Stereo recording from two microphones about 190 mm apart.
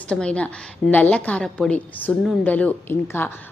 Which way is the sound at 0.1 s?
5° left (ahead or behind).